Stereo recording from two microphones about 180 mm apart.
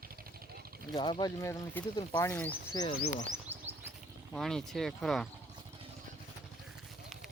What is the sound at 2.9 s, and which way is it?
Speech, 50° left (ahead or behind).